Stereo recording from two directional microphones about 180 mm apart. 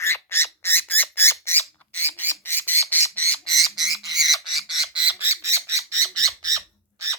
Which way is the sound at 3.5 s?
Centre (ahead or behind).